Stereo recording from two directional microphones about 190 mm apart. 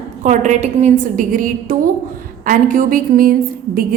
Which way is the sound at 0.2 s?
40° right (ahead or behind).